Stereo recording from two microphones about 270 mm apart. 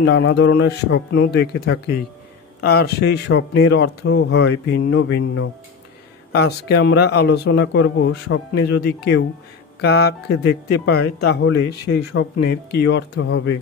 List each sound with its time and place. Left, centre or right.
0.0 s speech: left
9.8 s speech: left